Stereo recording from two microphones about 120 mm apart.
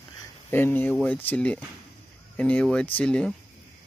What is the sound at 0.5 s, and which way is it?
Speech, 15° left (ahead or behind).